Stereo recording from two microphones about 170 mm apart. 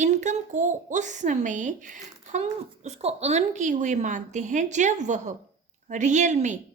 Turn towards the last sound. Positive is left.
turn(degrees=-45)  # may be behind; listen again after turning